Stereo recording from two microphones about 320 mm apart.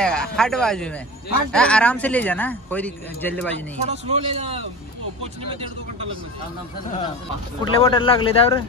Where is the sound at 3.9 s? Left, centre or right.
Centre.